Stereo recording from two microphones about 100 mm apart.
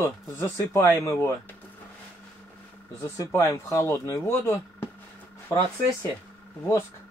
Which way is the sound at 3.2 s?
30° left (ahead or behind).